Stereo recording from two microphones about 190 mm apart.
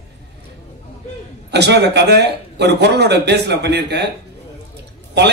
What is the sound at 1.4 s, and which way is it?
A man's voice, 60° right (ahead or behind).